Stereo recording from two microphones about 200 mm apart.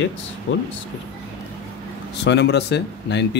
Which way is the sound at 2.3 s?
60° left (ahead or behind).